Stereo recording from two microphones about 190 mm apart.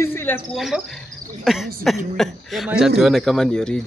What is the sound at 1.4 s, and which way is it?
Speech, centre (ahead or behind).